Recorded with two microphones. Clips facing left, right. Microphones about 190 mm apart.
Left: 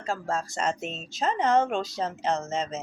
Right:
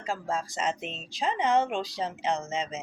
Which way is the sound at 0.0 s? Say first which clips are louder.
Left 2 dB; 15° right (ahead or behind).